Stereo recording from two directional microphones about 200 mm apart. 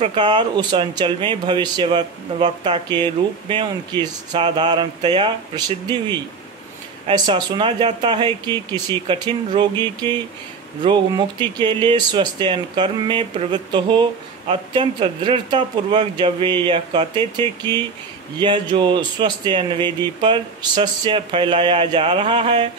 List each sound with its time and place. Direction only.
0.0 s speech: 25° right (ahead or behind)
10.8 s speech: 25° right (ahead or behind)